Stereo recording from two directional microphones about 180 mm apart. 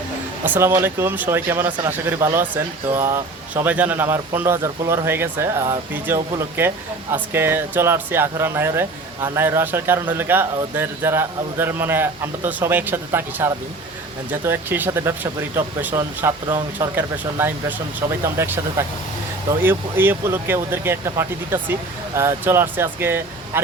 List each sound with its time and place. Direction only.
0.4 s speech: 10° right (ahead or behind)